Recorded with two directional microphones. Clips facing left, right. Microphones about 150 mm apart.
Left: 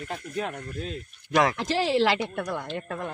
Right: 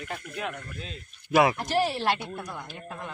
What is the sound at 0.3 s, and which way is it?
Speech, 35° left (ahead or behind).